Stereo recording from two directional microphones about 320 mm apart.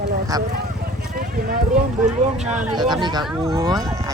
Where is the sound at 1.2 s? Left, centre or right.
Right.